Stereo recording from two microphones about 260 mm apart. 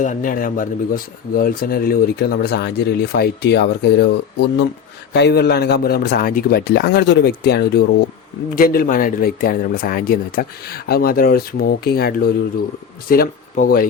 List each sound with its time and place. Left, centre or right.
0.0 s speech: left